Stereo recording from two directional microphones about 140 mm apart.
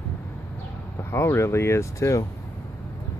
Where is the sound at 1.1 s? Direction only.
20° left (ahead or behind).